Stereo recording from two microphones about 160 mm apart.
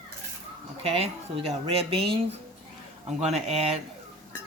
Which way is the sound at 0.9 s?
35° right (ahead or behind).